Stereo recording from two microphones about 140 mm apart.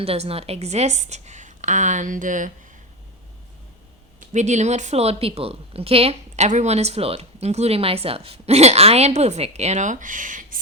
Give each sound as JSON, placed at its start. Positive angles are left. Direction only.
{"t": 0.0, "sound": "a woman's voice", "side_deg": -45}
{"t": 4.3, "sound": "a woman's voice", "side_deg": -55}